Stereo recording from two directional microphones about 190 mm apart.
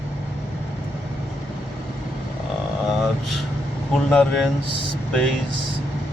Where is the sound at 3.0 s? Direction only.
Centre (ahead or behind).